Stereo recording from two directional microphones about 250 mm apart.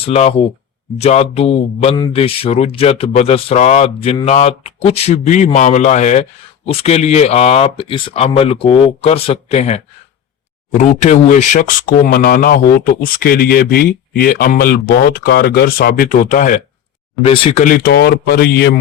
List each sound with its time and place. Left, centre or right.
0.0 s speech: left